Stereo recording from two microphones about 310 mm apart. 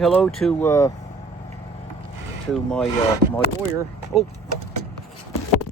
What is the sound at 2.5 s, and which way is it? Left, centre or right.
Speech, centre.